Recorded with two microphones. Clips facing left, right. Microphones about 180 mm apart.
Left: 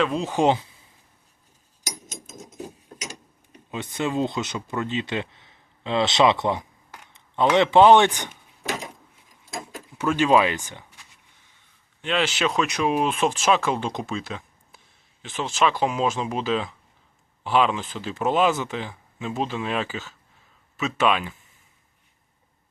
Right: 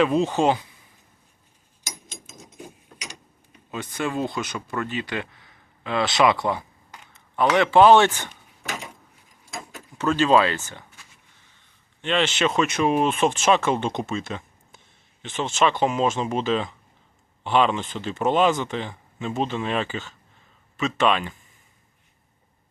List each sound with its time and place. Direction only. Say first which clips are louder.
0.0 s speech: right 4 dB; 5° right (ahead or behind)
0.3 s speech: left 1 dB; 15° left (ahead or behind)
2.0 s mechanisms: left 4 dB; 45° left (ahead or behind)
3.7 s speech: left 1 dB; 20° left (ahead or behind)
10.0 s speech: even; 10° left (ahead or behind)
12.0 s speech: right 1 dB; centre (ahead or behind)